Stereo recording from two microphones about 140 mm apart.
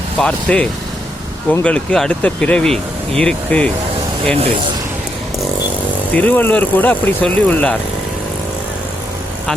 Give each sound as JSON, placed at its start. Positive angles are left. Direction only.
{"t": 0.2, "sound": "speech", "side_deg": 5}
{"t": 4.4, "sound": "speech", "side_deg": -45}
{"t": 6.1, "sound": "speech", "side_deg": 10}